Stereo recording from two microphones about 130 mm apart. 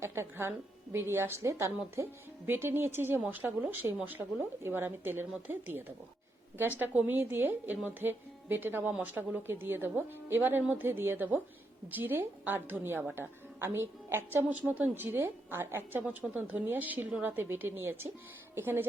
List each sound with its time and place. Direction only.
0.0 s a woman's voice: 20° right (ahead or behind)